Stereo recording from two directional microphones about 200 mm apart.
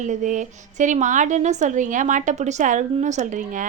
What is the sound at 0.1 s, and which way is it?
A woman's voice, 40° right (ahead or behind).